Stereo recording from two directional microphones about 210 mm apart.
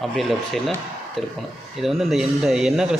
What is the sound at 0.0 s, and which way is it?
A man's voice, centre (ahead or behind).